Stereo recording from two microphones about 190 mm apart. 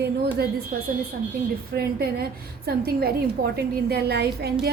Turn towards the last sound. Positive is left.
turn(degrees=-60)  # may be behind; listen again after turning